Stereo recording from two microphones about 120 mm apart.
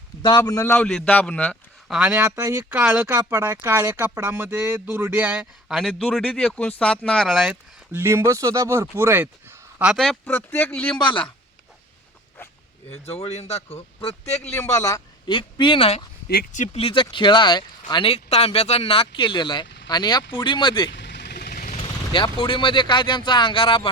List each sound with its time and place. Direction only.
0.2 s a man's voice: 40° left (ahead or behind)
0.6 s a man's voice: 10° left (ahead or behind)
1.9 s speech: 5° right (ahead or behind)
7.9 s speech: 20° right (ahead or behind)
9.9 s speech: centre (ahead or behind)
10.2 s a man's voice: 15° left (ahead or behind)
10.9 s speech: 45° left (ahead or behind)
12.9 s speech: 60° left (ahead or behind)
14.5 s a man's voice: 25° left (ahead or behind)
15.3 s speech: 40° left (ahead or behind)
16.5 s speech: 90° left
16.8 s speech: 45° left (ahead or behind)
21.7 s speech: 50° left (ahead or behind)